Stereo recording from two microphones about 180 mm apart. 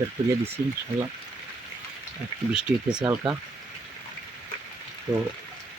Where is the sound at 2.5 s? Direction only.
5° right (ahead or behind).